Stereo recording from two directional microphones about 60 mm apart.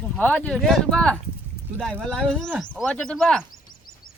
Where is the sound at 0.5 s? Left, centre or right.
Centre.